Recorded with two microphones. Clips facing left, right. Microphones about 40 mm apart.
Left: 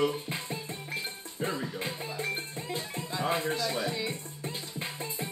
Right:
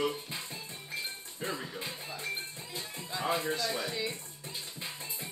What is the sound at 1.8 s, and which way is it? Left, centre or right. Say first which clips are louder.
Music: left 5 dB; left.